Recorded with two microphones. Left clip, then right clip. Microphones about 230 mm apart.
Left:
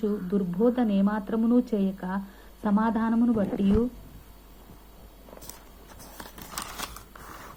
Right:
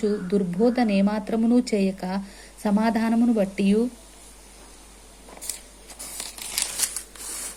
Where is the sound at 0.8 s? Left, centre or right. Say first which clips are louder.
Right 4 dB; right.